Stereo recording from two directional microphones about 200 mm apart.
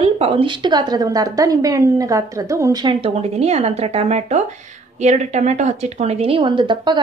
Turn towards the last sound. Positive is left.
turn(degrees=-25)  # may be behind; listen again after turning